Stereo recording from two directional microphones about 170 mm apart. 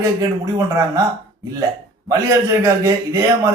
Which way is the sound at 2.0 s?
20° right (ahead or behind).